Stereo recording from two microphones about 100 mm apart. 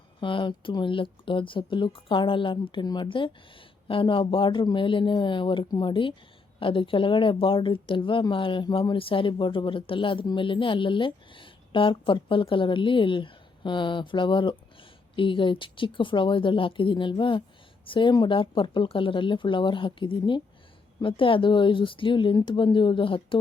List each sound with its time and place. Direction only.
0.2 s speech: 55° left (ahead or behind)